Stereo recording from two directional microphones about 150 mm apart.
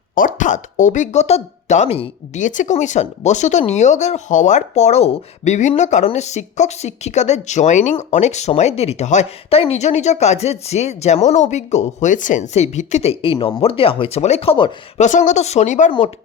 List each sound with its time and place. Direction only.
0.2 s speech: 60° left (ahead or behind); by 15.0 s 40° left (ahead or behind)
15.0 s speech: 55° left (ahead or behind)
15.9 s speech: 35° left (ahead or behind)